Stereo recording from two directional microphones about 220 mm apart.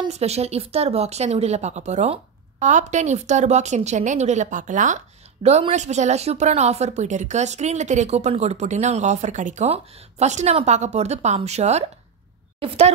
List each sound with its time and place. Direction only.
0.0 s a woman's voice: 30° right (ahead or behind)